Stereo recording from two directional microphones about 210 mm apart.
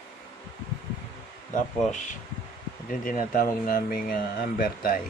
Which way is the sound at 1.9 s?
35° left (ahead or behind).